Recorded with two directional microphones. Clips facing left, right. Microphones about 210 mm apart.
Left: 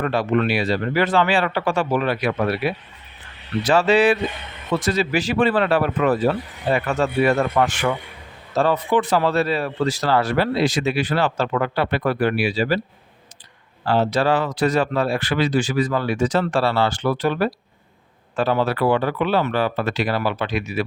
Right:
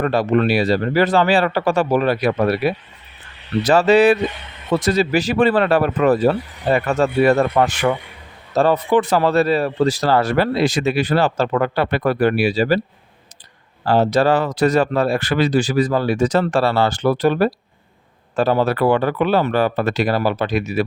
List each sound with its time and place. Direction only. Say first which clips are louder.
0.0 s speech: right 3 dB; 40° right (ahead or behind)
13.8 s speech: right 4 dB; 40° right (ahead or behind)